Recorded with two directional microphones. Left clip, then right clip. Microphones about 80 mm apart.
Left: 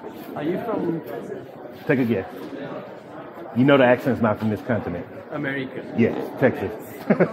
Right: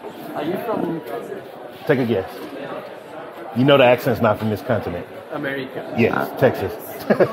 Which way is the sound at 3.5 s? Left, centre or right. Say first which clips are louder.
Right 3 dB; right.